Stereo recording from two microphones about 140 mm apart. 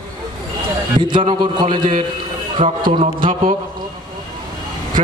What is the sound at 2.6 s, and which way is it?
Speech, 70° right (ahead or behind).